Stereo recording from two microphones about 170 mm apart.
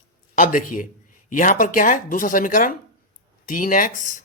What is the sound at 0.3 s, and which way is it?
Speech, 50° left (ahead or behind).